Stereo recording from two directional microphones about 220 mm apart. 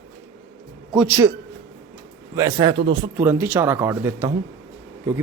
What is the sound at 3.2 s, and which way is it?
A man's voice, 10° right (ahead or behind).